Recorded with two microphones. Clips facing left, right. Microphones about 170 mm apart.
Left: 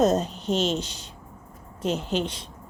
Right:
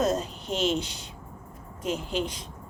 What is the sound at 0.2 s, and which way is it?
Speech, 10° right (ahead or behind).